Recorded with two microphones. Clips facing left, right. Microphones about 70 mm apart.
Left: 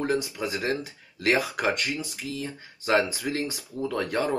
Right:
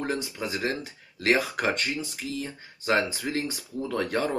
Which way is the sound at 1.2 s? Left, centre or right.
Right.